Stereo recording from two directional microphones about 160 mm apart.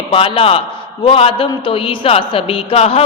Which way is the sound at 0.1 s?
35° left (ahead or behind).